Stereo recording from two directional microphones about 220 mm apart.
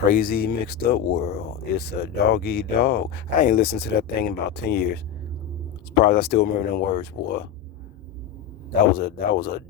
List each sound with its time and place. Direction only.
0.1 s speech: 40° left (ahead or behind)
6.0 s speech: 45° left (ahead or behind)
9.0 s speech: 45° left (ahead or behind)